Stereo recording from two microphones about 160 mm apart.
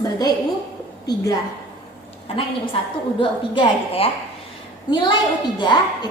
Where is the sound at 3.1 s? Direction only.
30° left (ahead or behind).